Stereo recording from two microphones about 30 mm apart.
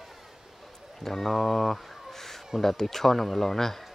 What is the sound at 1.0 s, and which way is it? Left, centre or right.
Speech, centre.